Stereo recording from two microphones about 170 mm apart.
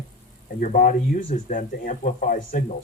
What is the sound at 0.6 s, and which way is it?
Speech, 55° left (ahead or behind).